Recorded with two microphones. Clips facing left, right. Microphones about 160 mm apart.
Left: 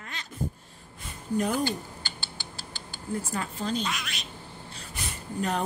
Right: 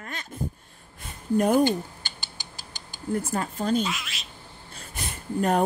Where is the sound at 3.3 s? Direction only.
50° right (ahead or behind).